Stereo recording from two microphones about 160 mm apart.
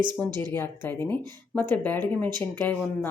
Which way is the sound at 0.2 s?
10° left (ahead or behind).